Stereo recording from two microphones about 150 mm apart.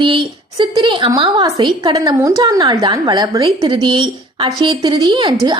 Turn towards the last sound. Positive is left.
turn(degrees=-35)  # may be behind; listen again after turning